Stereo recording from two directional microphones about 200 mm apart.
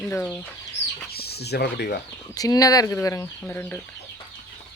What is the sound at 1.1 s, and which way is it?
Speech, 50° left (ahead or behind).